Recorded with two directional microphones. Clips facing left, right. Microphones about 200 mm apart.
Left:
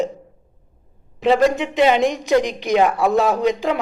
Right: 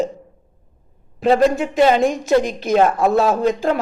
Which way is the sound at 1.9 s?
15° left (ahead or behind).